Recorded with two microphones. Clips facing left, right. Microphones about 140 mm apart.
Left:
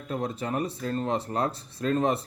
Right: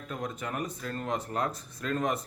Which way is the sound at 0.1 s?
30° left (ahead or behind).